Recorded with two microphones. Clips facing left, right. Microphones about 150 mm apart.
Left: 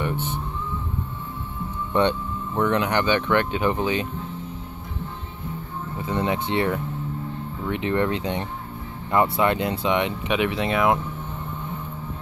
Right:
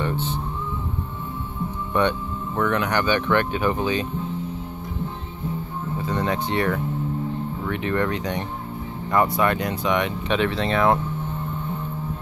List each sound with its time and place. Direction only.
2.0 s speech: 20° left (ahead or behind)
6.0 s speech: 20° left (ahead or behind)